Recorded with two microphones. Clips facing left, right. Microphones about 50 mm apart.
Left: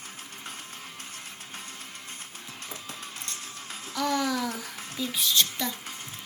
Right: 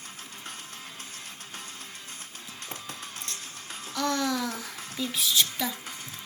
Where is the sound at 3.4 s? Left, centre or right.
Right.